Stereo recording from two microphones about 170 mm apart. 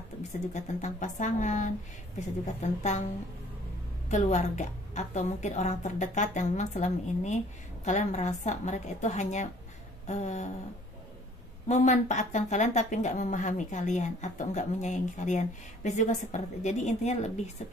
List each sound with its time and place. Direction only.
0.5 s speech: 45° left (ahead or behind)
4.1 s speech: 45° left (ahead or behind)
11.6 s speech: 45° left (ahead or behind)